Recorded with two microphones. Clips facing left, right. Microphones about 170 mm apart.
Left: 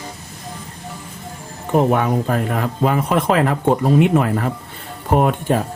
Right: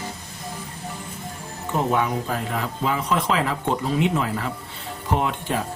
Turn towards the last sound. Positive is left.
turn(degrees=50)  # may be behind; listen again after turning